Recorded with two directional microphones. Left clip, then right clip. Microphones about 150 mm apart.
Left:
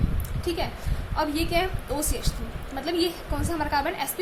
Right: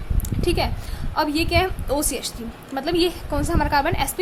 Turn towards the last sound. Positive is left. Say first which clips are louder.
# right 5 dB
turn(degrees=-30)  # may be behind; listen again after turning